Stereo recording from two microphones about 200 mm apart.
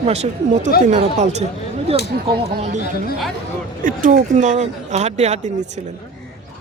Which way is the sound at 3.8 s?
40° right (ahead or behind).